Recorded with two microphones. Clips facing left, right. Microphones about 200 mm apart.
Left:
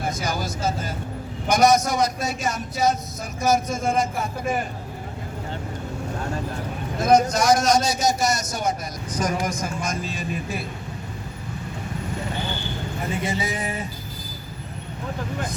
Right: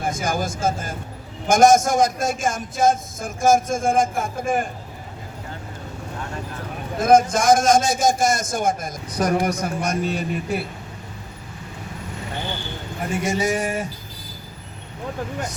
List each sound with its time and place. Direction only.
0.0 s a man's voice: 50° right (ahead or behind)
7.0 s a man's voice: 50° right (ahead or behind)
13.5 s music: 85° right